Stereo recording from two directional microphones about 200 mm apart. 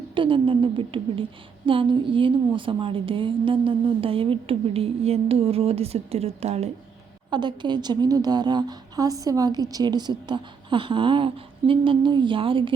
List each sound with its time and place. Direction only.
0.1 s a woman's voice: 25° right (ahead or behind)
7.3 s a woman's voice: 20° right (ahead or behind)